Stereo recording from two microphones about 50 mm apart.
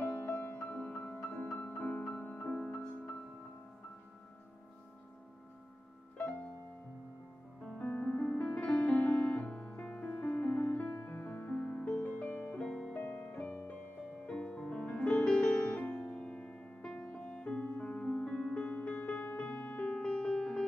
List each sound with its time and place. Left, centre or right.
0.0 s music: left
7.8 s music: left
8.2 s music: centre; by 12.5 s left
12.5 s music: centre
12.9 s music: left
19.8 s music: left